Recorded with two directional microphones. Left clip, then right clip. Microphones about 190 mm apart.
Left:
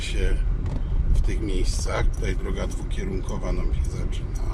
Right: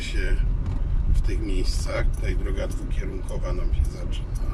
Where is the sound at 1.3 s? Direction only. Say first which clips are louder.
Left 1 dB; 15° left (ahead or behind).